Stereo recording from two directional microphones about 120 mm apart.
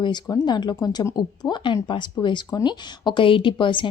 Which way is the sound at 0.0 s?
40° left (ahead or behind).